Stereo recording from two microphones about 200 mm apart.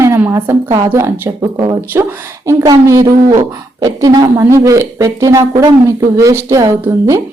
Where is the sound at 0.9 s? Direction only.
15° right (ahead or behind).